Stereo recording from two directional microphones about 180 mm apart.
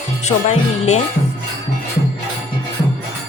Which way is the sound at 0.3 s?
40° left (ahead or behind).